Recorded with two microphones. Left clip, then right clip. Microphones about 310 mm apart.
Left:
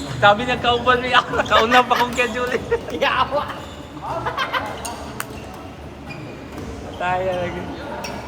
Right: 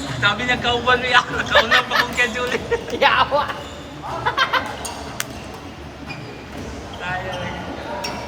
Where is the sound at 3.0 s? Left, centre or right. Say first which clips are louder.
Right 4 dB; right.